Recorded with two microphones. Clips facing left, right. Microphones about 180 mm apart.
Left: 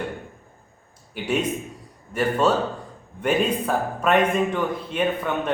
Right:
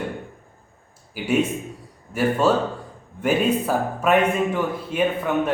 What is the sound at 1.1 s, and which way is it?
Speech, 5° right (ahead or behind).